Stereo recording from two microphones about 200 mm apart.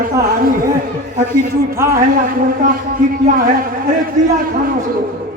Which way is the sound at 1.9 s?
45° right (ahead or behind).